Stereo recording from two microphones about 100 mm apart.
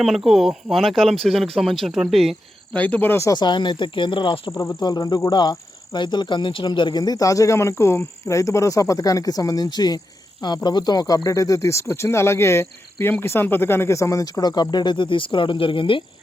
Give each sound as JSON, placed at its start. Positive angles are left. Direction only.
{"t": 0.0, "sound": "speech", "side_deg": -5}
{"t": 2.7, "sound": "speech", "side_deg": 15}
{"t": 3.2, "sound": "speech", "side_deg": 45}
{"t": 4.5, "sound": "speech", "side_deg": 30}
{"t": 4.8, "sound": "speech", "side_deg": 45}